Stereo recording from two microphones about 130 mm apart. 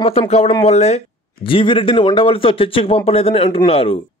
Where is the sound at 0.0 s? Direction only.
50° left (ahead or behind).